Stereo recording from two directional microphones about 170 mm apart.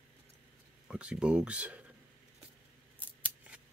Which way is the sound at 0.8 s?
5° right (ahead or behind).